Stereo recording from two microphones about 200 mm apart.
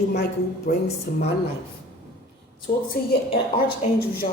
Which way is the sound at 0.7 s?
50° left (ahead or behind).